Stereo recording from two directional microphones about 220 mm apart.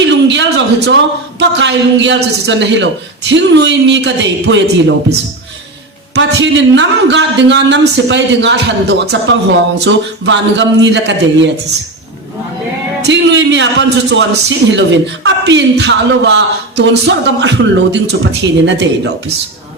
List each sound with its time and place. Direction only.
0.0 s a sound: 55° right (ahead or behind)
1.4 s a man's voice: 55° right (ahead or behind)
6.1 s a man's voice: 55° right (ahead or behind)
13.0 s a man's voice: 50° right (ahead or behind)